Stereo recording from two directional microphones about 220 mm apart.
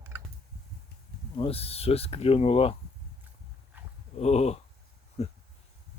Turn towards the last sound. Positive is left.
turn(degrees=30)  # may be behind; listen again after turning